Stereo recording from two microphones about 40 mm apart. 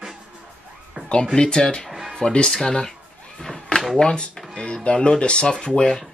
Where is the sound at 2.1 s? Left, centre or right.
Centre.